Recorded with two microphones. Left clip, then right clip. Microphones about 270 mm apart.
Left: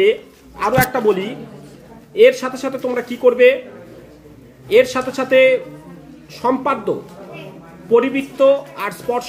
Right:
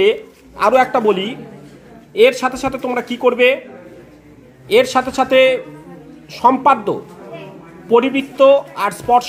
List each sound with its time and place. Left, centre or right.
0.0 s speech: centre
4.6 s speech: centre